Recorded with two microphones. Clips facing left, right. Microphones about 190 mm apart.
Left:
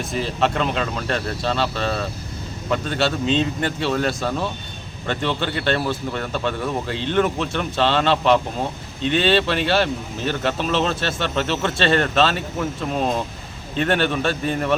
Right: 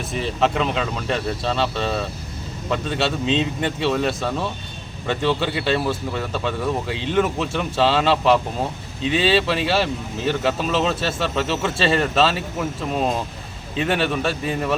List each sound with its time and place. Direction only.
0.0 s speech: centre (ahead or behind)